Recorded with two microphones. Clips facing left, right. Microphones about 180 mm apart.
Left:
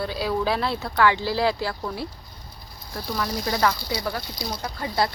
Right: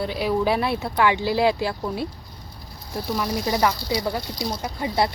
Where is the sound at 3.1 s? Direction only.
15° right (ahead or behind).